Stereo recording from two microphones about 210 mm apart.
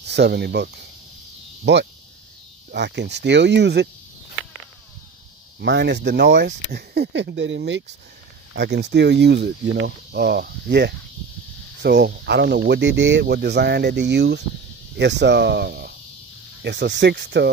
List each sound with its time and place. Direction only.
0.0 s speech: 55° right (ahead or behind)
5.6 s speech: 55° right (ahead or behind)